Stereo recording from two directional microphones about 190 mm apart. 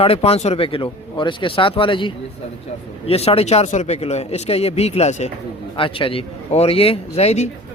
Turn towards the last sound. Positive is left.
turn(degrees=35)  # may be behind; listen again after turning